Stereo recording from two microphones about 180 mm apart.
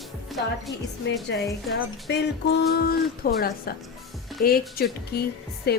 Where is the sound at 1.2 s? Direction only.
70° left (ahead or behind).